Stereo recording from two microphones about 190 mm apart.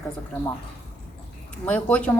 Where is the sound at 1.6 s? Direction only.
5° left (ahead or behind).